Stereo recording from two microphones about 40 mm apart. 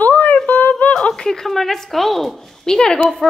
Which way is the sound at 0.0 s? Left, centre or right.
Left.